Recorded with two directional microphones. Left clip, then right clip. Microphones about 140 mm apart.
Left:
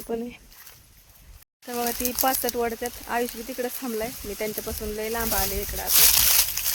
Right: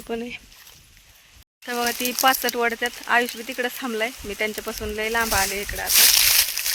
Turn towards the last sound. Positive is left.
turn(degrees=5)  # may be behind; listen again after turning